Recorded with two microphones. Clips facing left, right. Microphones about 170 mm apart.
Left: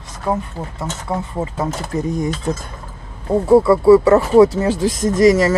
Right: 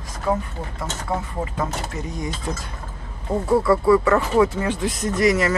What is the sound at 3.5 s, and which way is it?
Speech, 30° left (ahead or behind).